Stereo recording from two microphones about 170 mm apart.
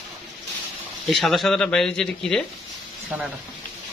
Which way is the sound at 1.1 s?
Centre (ahead or behind).